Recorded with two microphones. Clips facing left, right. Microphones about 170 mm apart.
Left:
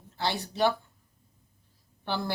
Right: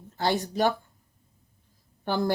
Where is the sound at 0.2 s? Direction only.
45° right (ahead or behind).